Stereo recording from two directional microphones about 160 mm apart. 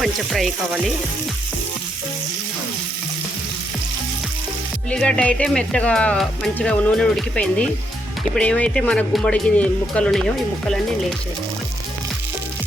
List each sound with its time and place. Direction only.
0.0 s frying: centre (ahead or behind)
4.9 s speech: 5° left (ahead or behind)